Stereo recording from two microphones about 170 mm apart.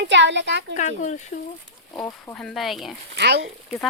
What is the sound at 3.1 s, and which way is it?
Speech, 90° right.